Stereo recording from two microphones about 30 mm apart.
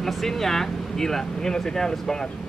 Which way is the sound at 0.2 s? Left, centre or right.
Centre.